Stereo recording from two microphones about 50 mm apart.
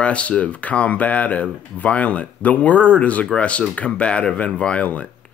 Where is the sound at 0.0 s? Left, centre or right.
Left.